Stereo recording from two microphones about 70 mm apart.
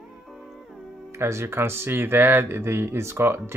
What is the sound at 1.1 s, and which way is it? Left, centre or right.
Speech, right.